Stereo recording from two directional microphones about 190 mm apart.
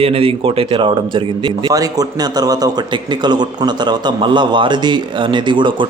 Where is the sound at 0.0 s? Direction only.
30° right (ahead or behind).